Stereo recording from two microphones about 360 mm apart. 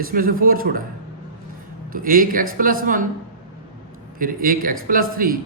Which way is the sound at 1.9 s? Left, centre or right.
Right.